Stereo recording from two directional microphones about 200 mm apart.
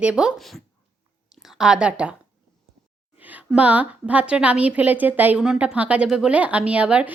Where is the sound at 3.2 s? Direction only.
10° right (ahead or behind).